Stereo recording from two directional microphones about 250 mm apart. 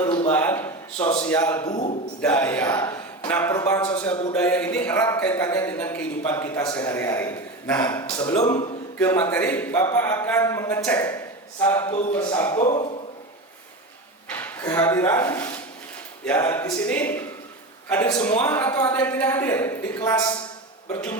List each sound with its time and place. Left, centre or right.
0.3 s a man's voice: centre
2.2 s a man's voice: centre
8.4 s speech: centre
9.0 s a man's voice: centre
11.9 s speech: left
12.1 s a man's voice: centre
14.3 s a man's voice: centre